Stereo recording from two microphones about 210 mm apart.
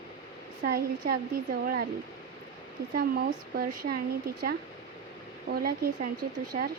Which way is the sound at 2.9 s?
45° right (ahead or behind).